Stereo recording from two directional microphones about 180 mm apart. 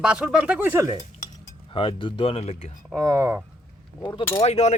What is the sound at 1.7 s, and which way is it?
Speech, 30° left (ahead or behind).